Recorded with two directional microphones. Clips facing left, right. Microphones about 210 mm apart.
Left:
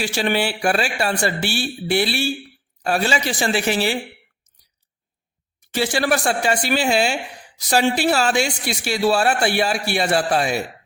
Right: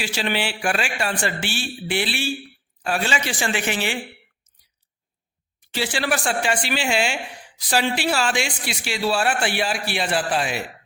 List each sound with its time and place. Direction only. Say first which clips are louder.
0.0 s a man's voice: left 4 dB; 45° left (ahead or behind)
5.7 s a man's voice: left 4 dB; 45° left (ahead or behind)